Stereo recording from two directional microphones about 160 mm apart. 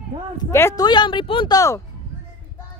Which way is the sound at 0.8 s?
30° left (ahead or behind).